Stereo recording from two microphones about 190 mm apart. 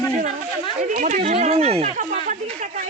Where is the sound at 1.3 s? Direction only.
35° right (ahead or behind).